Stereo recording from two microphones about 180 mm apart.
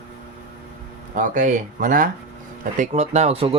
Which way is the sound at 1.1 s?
45° right (ahead or behind).